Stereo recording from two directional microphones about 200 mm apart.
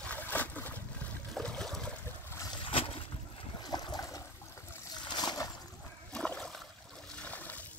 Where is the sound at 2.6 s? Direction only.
25° left (ahead or behind).